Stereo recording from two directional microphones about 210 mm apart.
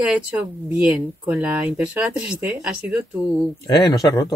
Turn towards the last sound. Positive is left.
turn(degrees=15)  # may be behind; listen again after turning